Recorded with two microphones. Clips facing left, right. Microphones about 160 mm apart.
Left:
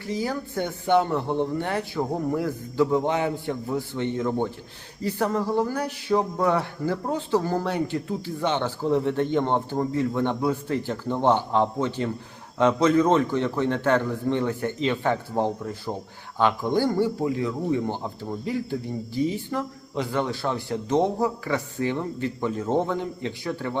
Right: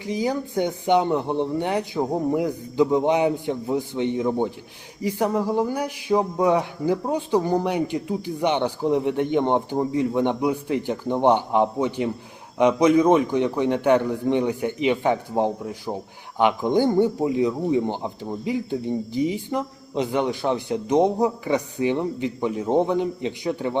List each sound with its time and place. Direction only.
0.0 s a man's voice: 15° right (ahead or behind)